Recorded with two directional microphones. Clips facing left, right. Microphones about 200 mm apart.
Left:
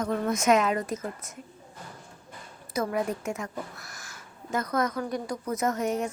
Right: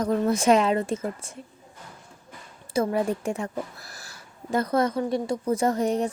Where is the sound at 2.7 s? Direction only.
30° right (ahead or behind).